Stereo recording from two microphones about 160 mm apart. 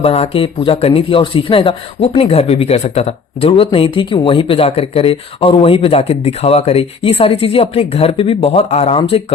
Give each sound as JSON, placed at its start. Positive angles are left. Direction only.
{"t": 0.0, "sound": "speech", "side_deg": 35}